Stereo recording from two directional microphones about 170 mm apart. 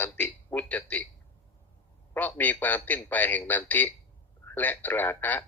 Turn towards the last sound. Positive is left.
turn(degrees=10)  # may be behind; listen again after turning